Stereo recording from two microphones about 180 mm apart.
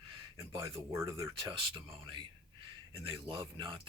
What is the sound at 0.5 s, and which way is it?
Speech, 20° right (ahead or behind).